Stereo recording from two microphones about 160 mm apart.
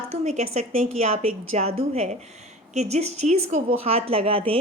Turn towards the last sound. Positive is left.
turn(degrees=-35)  # may be behind; listen again after turning